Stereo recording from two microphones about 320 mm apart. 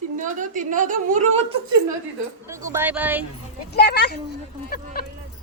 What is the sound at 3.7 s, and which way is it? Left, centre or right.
Speech, left.